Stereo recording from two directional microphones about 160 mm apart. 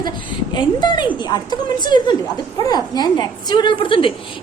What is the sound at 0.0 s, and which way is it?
A woman's voice, 25° left (ahead or behind).